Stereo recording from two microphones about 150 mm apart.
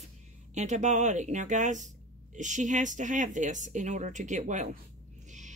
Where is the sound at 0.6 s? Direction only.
50° right (ahead or behind).